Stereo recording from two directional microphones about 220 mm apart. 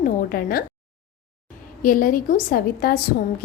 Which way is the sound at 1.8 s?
40° left (ahead or behind).